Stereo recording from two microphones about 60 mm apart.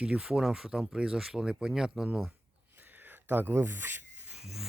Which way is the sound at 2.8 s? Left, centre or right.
Right.